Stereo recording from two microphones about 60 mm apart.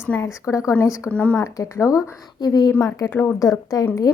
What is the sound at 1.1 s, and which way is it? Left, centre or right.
Speech, left.